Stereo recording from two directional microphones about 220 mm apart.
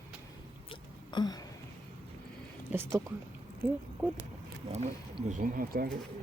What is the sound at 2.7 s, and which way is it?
Speech, 10° right (ahead or behind).